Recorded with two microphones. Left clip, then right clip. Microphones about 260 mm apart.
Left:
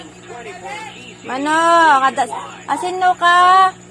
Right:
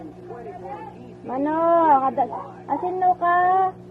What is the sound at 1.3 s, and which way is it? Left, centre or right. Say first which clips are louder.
Speech: left 6 dB; left.